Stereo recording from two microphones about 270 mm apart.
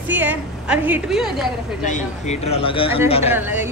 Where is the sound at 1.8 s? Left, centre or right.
Left.